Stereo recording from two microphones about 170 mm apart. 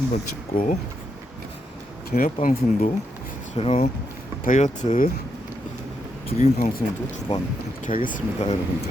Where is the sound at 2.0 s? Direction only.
55° left (ahead or behind).